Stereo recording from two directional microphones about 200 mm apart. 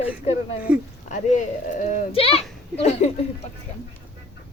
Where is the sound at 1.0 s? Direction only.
40° left (ahead or behind).